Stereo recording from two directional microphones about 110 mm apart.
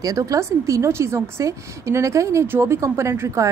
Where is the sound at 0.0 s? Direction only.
30° right (ahead or behind).